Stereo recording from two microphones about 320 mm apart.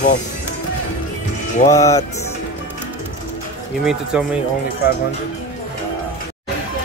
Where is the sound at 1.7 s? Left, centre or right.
Centre.